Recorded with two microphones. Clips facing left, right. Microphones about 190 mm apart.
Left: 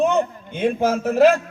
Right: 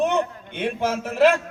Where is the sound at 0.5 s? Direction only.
45° left (ahead or behind).